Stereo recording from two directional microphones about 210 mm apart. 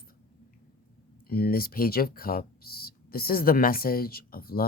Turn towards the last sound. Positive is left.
turn(degrees=45)  # may be behind; listen again after turning